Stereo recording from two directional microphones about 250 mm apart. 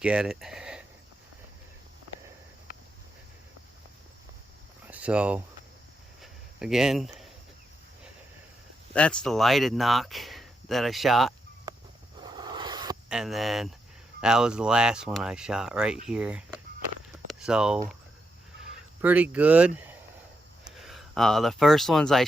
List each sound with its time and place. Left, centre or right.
0.0 s speech: centre
4.9 s speech: centre
6.6 s speech: centre
8.9 s speech: centre
11.7 s a sound: centre
13.1 s speech: centre
17.2 s a sound: centre
19.0 s speech: centre